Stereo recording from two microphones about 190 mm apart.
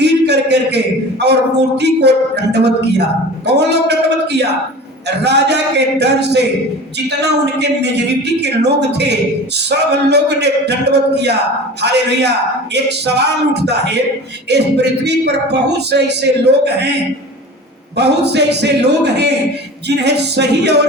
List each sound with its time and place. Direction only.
0.0 s a sound: 60° right (ahead or behind)
1.2 s speech: 60° right (ahead or behind)
17.9 s speech: 60° right (ahead or behind)